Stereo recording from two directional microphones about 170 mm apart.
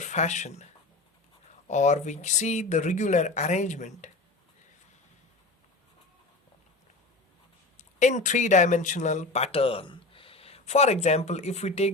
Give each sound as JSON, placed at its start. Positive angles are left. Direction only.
{"t": 0.0, "sound": "speech", "side_deg": 45}
{"t": 7.8, "sound": "speech", "side_deg": 45}